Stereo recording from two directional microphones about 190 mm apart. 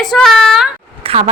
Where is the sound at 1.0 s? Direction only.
30° right (ahead or behind).